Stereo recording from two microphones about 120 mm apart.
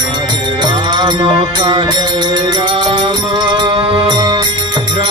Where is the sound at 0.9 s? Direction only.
45° right (ahead or behind).